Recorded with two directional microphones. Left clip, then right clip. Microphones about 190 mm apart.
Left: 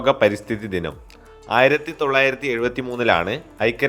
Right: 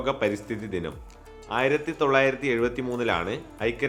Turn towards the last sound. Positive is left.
turn(degrees=25)  # may be behind; listen again after turning